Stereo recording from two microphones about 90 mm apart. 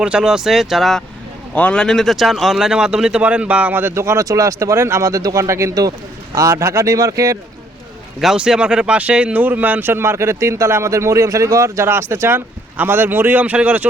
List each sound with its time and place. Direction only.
0.0 s speech: 10° right (ahead or behind)
1.5 s speech: 15° left (ahead or behind); by 3.9 s 20° right (ahead or behind)
3.9 s speech: 30° right (ahead or behind)
8.2 s speech: 5° right (ahead or behind)